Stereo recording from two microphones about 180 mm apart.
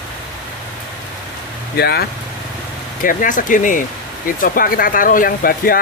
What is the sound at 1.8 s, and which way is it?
Speech, 60° left (ahead or behind).